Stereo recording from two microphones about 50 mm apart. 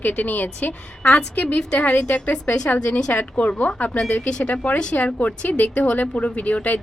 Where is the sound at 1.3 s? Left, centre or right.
Left.